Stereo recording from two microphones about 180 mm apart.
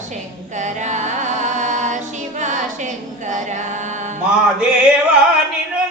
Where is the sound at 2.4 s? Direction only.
40° right (ahead or behind).